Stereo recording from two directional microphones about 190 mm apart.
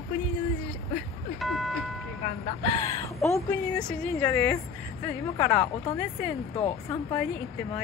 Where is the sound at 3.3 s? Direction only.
10° left (ahead or behind).